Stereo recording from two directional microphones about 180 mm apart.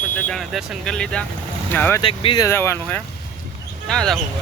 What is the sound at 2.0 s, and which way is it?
Speech, 30° left (ahead or behind).